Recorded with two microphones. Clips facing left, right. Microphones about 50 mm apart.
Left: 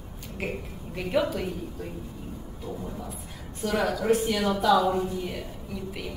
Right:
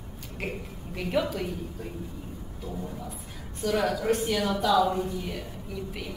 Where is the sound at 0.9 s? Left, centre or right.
Centre.